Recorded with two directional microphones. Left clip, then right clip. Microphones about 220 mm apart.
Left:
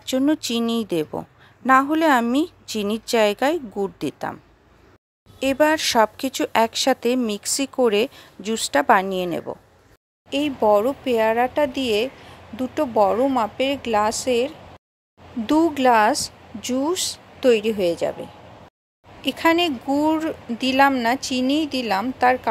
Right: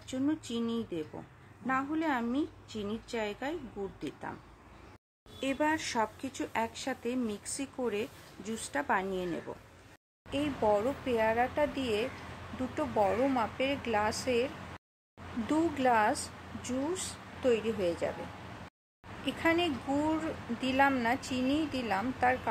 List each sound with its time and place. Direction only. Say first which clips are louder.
0.0 s a woman's voice: left 13 dB; 40° left (ahead or behind)
5.4 s a woman's voice: left 13 dB; 45° left (ahead or behind)
19.2 s speech: left 11 dB; 45° left (ahead or behind)